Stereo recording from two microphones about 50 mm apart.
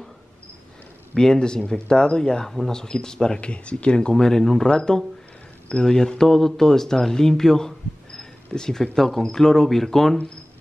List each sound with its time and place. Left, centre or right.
1.1 s speech: centre
4.1 s speech: centre